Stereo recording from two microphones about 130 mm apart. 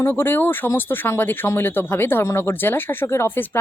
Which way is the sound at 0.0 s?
15° left (ahead or behind).